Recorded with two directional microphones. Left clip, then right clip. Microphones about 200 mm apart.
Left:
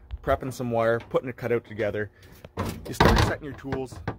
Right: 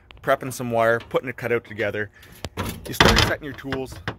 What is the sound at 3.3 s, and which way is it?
Speech, 15° right (ahead or behind).